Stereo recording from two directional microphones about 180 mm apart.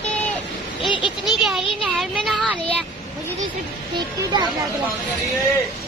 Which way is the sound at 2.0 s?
Centre (ahead or behind).